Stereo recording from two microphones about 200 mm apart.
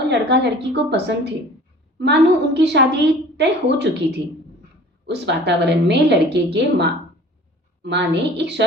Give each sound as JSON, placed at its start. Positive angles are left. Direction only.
{"t": 0.1, "sound": "a woman's voice", "side_deg": -60}
{"t": 5.0, "sound": "a woman's voice", "side_deg": -60}